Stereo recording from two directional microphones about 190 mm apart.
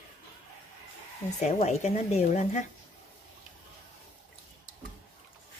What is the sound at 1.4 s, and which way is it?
A woman's voice, 35° left (ahead or behind).